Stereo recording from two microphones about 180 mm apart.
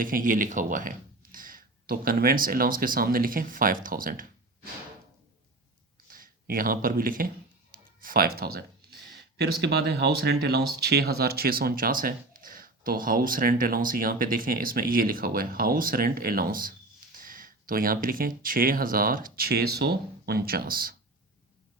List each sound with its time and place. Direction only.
0.0 s speech: 50° right (ahead or behind)
6.1 s speech: 50° right (ahead or behind)
7.7 s music: 55° right (ahead or behind)
9.4 s speech: 65° right (ahead or behind)